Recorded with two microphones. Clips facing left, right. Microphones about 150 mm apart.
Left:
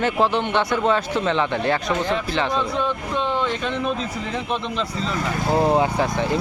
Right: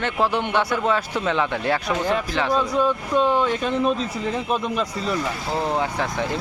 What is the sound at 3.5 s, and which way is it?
Speech, 40° right (ahead or behind).